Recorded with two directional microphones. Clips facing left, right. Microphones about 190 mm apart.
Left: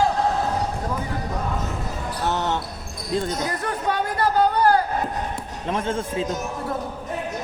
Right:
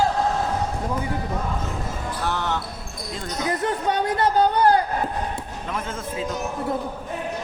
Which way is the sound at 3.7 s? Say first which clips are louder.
Right 2 dB; 20° right (ahead or behind).